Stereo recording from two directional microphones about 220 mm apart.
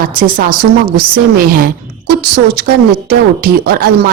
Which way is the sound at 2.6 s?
45° right (ahead or behind).